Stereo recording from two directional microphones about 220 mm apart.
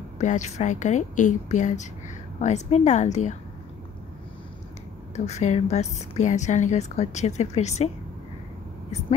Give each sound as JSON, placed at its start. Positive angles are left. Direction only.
{"t": 0.2, "sound": "a woman's voice", "side_deg": 30}
{"t": 5.1, "sound": "a woman's voice", "side_deg": 30}